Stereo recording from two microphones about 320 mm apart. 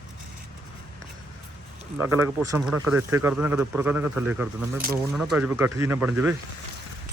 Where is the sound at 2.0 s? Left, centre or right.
Centre.